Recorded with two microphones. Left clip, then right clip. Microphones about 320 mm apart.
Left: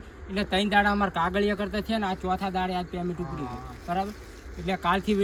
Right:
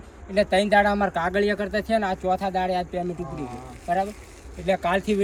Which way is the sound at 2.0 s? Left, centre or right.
Centre.